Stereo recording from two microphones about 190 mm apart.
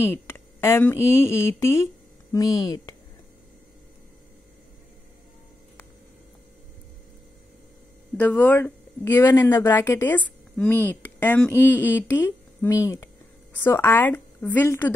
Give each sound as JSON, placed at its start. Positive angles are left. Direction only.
{"t": 0.0, "sound": "a woman's voice", "side_deg": 10}
{"t": 8.2, "sound": "a woman's voice", "side_deg": 10}